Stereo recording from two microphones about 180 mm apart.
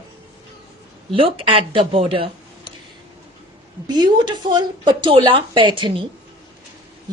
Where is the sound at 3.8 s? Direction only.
25° right (ahead or behind).